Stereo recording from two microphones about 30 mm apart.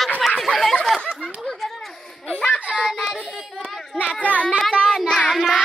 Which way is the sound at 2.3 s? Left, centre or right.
Left.